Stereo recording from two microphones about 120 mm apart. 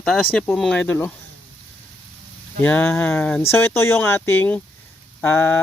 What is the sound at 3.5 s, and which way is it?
Speech, 20° left (ahead or behind).